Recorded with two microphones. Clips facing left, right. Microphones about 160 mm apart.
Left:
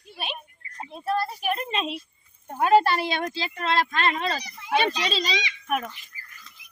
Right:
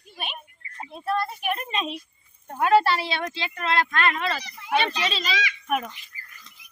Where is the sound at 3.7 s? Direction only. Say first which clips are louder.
Even; 30° left (ahead or behind).